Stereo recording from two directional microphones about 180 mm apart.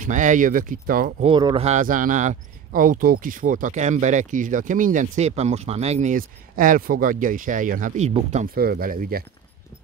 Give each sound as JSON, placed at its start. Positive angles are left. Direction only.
{"t": 0.0, "sound": "speech", "side_deg": -45}
{"t": 1.2, "sound": "speech", "side_deg": -30}
{"t": 8.5, "sound": "speech", "side_deg": -55}